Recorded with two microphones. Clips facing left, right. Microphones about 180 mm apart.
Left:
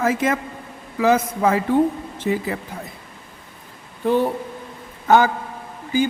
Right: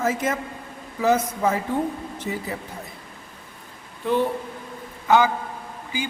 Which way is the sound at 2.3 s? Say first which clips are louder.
Left 8 dB; 90° left.